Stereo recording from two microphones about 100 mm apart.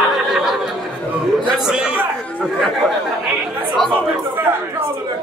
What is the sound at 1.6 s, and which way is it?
A man's voice, 5° right (ahead or behind).